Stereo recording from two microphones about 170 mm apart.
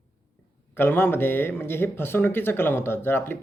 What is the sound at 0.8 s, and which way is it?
Speech, 10° left (ahead or behind).